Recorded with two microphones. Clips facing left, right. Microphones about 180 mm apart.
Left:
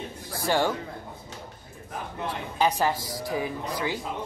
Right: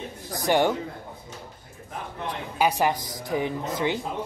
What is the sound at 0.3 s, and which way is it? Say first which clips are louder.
Speech: right 3 dB; 20° right (ahead or behind).